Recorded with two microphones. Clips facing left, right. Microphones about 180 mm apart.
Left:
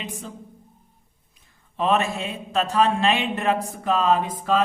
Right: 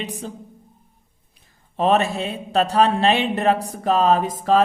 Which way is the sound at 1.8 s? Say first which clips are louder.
Right 3 dB; 35° right (ahead or behind).